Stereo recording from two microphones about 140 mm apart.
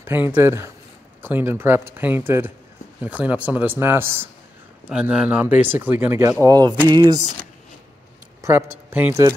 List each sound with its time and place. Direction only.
0.0 s speech: 15° right (ahead or behind)
4.8 s speech: 5° right (ahead or behind)
6.4 s a sound: 25° right (ahead or behind)
6.9 s speech: 30° right (ahead or behind)
8.4 s speech: 20° right (ahead or behind)